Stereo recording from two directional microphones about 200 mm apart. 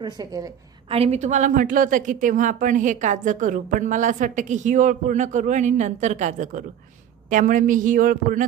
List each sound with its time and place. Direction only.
0.0 s a woman's voice: 20° right (ahead or behind)
0.9 s a woman's voice: 30° right (ahead or behind)